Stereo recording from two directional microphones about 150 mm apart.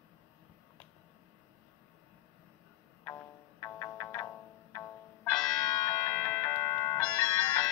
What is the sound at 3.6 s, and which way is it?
Music, 20° left (ahead or behind).